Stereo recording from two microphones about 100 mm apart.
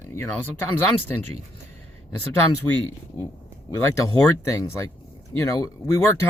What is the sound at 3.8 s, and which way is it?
Speech, 35° left (ahead or behind).